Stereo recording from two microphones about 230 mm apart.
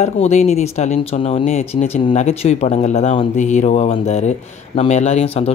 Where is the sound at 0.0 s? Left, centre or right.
Left.